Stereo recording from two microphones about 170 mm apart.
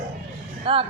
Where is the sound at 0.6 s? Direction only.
30° right (ahead or behind).